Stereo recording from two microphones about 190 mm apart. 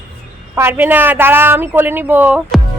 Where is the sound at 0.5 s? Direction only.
10° right (ahead or behind).